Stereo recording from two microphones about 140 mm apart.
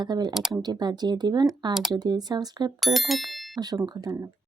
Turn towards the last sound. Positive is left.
turn(degrees=-25)  # may be behind; listen again after turning